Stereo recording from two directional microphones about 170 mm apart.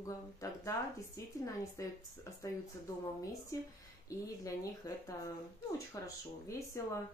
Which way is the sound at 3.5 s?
20° left (ahead or behind).